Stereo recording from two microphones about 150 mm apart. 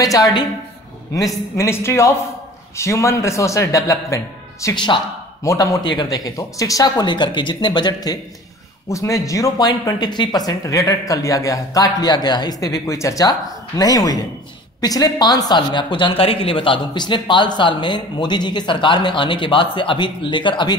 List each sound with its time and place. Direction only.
0.0 s a man's voice: 25° left (ahead or behind)
1.6 s a man's voice: 20° left (ahead or behind)